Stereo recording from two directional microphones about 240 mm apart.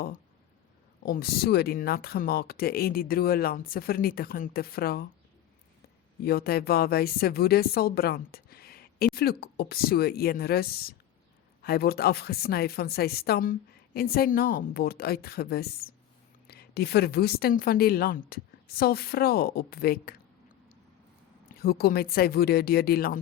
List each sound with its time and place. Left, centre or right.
1.0 s a woman's voice: left
6.2 s a woman's voice: left
21.6 s a woman's voice: left